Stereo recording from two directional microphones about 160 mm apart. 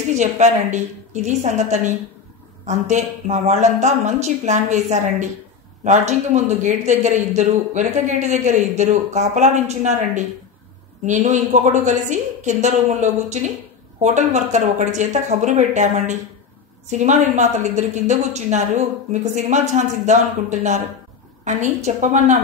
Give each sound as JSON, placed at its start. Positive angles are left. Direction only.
{"t": 0.1, "sound": "speech", "side_deg": -45}